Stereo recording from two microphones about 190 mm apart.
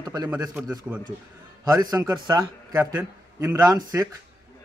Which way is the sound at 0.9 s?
5° right (ahead or behind).